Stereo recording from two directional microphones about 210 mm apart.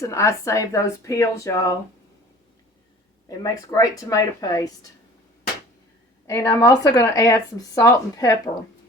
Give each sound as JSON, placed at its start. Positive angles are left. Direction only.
{"t": 0.0, "sound": "speech", "side_deg": 15}
{"t": 3.2, "sound": "speech", "side_deg": 15}
{"t": 6.2, "sound": "speech", "side_deg": 15}